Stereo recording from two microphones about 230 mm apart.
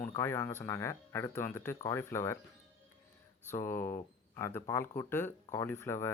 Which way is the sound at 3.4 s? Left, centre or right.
Centre.